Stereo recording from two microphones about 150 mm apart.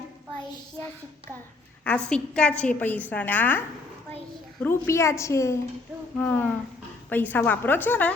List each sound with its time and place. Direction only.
1.8 s a woman's voice: 10° left (ahead or behind)
4.6 s a woman's voice: 15° left (ahead or behind)